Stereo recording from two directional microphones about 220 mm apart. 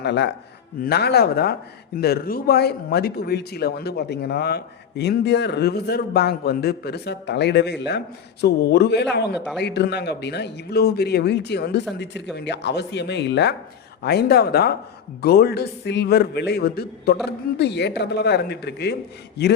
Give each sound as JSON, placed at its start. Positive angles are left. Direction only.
{"t": 0.0, "sound": "speech", "side_deg": 50}